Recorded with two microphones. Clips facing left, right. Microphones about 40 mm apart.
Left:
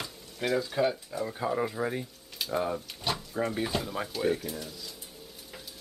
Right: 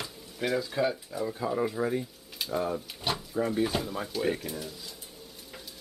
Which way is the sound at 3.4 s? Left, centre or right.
Centre.